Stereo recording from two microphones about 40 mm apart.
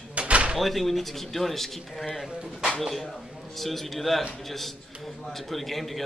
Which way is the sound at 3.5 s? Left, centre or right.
Centre.